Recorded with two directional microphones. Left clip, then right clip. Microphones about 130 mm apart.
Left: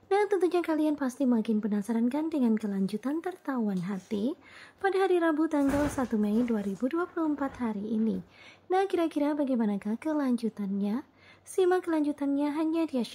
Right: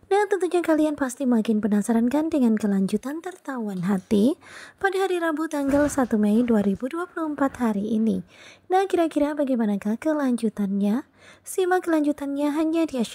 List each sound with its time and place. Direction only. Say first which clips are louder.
0.1 s a woman's voice: right 4 dB; 35° right (ahead or behind); by 4.4 s 60° right (ahead or behind)
4.8 s a woman's voice: right 3 dB; 40° right (ahead or behind)
8.6 s a woman's voice: right 6 dB; 35° right (ahead or behind)